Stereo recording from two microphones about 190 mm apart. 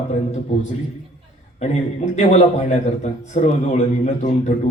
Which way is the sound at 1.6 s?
35° left (ahead or behind).